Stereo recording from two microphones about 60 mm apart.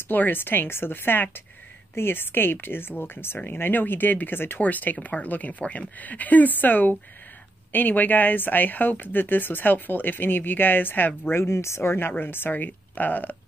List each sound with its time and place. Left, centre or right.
0.1 s speech: left